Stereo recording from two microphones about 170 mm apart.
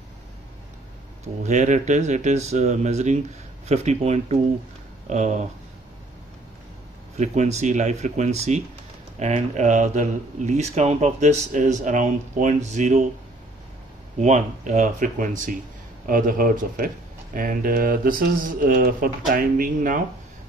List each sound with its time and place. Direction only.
1.2 s speech: 45° right (ahead or behind)
7.2 s speech: 40° right (ahead or behind)
14.2 s speech: 45° right (ahead or behind)